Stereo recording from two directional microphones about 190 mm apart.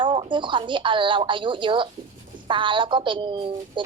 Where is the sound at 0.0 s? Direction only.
25° right (ahead or behind).